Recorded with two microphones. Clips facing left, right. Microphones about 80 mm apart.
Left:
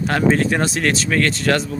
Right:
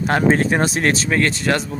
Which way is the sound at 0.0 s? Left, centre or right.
Right.